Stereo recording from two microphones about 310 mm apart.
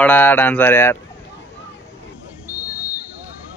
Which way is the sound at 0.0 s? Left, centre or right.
Centre.